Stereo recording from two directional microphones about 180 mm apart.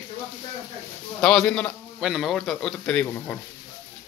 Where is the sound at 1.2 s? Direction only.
5° left (ahead or behind).